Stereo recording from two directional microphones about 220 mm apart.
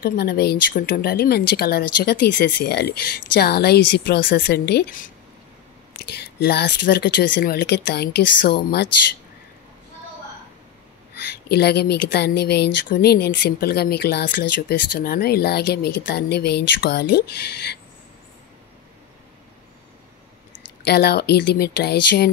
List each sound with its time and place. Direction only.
0.0 s speech: 45° left (ahead or behind)
6.1 s speech: 50° left (ahead or behind)
11.1 s speech: 45° left (ahead or behind)
20.8 s speech: 50° left (ahead or behind)